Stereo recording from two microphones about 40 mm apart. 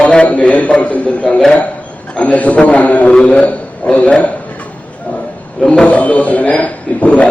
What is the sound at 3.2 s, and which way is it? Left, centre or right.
Speech, left.